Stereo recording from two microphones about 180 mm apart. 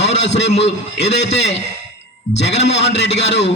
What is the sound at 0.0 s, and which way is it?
A man's voice, 75° left (ahead or behind).